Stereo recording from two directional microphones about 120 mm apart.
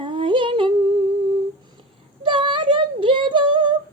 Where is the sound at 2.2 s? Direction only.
45° right (ahead or behind).